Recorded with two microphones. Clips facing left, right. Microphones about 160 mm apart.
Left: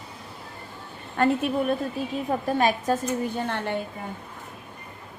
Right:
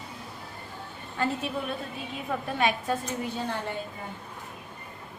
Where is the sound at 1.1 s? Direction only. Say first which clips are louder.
Left 7 dB; 55° left (ahead or behind).